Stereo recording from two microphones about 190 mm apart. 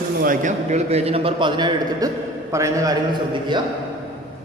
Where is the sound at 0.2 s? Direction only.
45° right (ahead or behind); by 3.0 s 15° right (ahead or behind).